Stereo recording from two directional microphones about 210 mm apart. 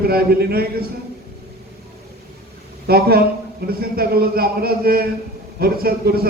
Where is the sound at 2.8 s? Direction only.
45° right (ahead or behind).